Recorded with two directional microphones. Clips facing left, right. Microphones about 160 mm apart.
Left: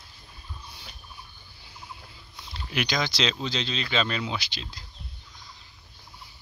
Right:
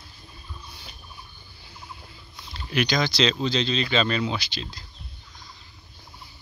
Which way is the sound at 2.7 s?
10° left (ahead or behind).